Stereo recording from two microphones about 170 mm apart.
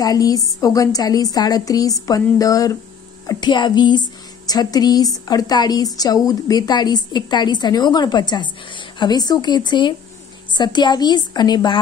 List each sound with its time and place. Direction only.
0.0 s a woman's voice: 20° left (ahead or behind)